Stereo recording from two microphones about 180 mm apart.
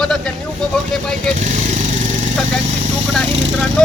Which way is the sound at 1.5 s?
40° right (ahead or behind).